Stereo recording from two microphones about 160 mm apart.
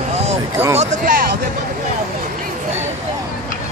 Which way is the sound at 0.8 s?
55° right (ahead or behind).